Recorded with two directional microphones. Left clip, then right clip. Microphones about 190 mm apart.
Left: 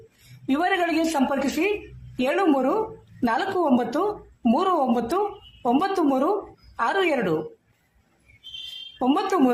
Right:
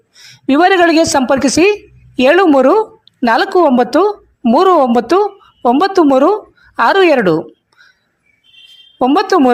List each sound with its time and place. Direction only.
0.4 s a woman's voice: 50° right (ahead or behind)
9.0 s speech: 50° right (ahead or behind)